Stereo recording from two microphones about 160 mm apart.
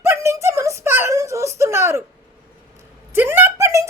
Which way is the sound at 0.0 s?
15° right (ahead or behind).